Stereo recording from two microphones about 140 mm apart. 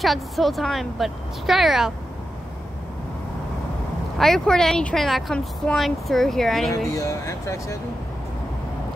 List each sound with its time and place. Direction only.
0.0 s speech: centre (ahead or behind)
4.2 s speech: 5° left (ahead or behind)
6.7 s speech: 25° left (ahead or behind)